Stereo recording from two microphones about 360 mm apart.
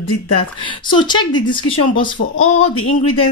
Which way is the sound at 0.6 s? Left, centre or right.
Centre.